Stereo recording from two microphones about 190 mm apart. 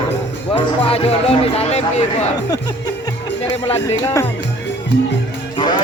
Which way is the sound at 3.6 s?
30° left (ahead or behind).